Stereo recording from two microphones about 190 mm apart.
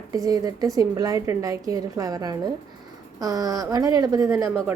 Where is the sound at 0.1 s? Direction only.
15° right (ahead or behind).